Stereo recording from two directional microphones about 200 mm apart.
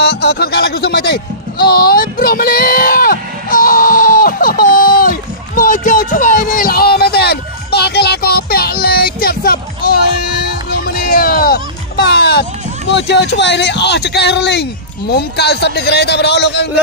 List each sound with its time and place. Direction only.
0.0 s bleat: 55° left (ahead or behind)
5.6 s a sound: 45° left (ahead or behind)
10.7 s music: 50° left (ahead or behind)